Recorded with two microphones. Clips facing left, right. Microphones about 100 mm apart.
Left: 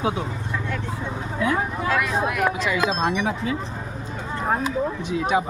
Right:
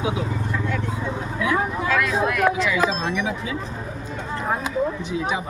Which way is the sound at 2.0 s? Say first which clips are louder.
Right 3 dB; 20° left (ahead or behind).